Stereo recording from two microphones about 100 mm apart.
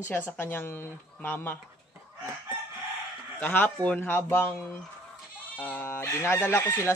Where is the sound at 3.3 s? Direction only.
15° left (ahead or behind).